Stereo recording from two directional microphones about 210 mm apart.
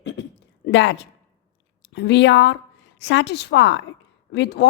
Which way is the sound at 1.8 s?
55° left (ahead or behind).